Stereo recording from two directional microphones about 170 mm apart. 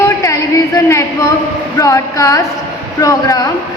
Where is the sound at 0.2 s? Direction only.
20° left (ahead or behind).